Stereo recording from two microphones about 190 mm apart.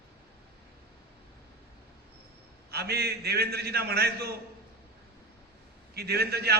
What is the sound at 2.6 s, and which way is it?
A man's voice, 55° right (ahead or behind).